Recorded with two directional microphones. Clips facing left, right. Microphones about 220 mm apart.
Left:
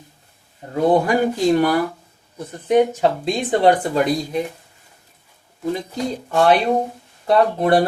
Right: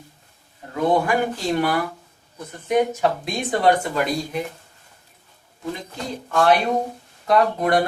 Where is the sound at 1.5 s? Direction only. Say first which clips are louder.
Left 5 dB; 40° left (ahead or behind).